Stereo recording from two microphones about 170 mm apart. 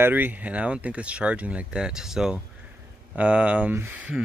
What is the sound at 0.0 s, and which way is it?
Speech, 10° right (ahead or behind).